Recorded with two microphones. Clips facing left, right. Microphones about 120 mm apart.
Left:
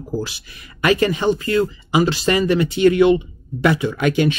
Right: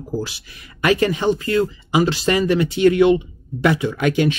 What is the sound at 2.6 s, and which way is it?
A man's voice, 15° left (ahead or behind).